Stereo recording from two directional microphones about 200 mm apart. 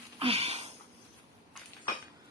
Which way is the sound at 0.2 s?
30° right (ahead or behind).